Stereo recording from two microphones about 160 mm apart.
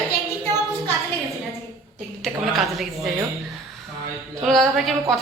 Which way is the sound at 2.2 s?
Centre (ahead or behind).